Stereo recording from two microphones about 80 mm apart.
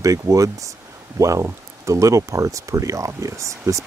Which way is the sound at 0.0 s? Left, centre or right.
Right.